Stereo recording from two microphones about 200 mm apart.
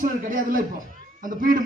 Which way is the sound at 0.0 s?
40° right (ahead or behind).